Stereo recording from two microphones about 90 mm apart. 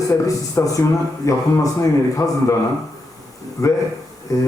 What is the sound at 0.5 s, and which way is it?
A man's voice, 40° left (ahead or behind).